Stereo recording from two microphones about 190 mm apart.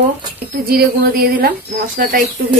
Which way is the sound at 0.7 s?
50° right (ahead or behind).